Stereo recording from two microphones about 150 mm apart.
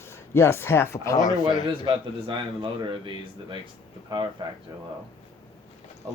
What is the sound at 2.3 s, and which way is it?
Speech, 30° right (ahead or behind).